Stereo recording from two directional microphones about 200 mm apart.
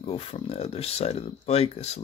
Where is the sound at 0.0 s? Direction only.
30° left (ahead or behind).